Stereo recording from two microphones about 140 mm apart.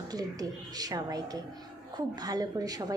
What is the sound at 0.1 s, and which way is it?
Speech, 25° right (ahead or behind).